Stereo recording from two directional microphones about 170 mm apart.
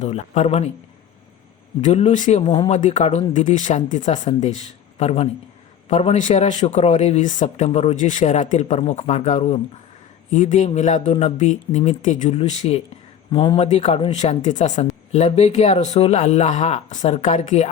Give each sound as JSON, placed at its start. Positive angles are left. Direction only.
{"t": 0.0, "sound": "speech", "side_deg": 40}
{"t": 1.8, "sound": "speech", "side_deg": 40}